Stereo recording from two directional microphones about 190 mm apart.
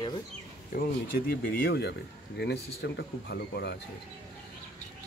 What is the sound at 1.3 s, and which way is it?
Speech, 55° left (ahead or behind).